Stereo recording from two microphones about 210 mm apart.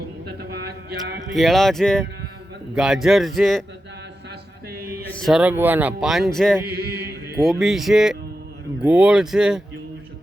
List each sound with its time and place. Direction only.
1.3 s a man's voice: centre (ahead or behind)
4.7 s mantra: 45° right (ahead or behind)
5.1 s a man's voice: centre (ahead or behind)
6.7 s chant: 50° right (ahead or behind)
7.4 s a man's voice: centre (ahead or behind)